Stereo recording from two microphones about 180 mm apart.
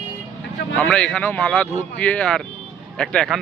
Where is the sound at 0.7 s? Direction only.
5° left (ahead or behind).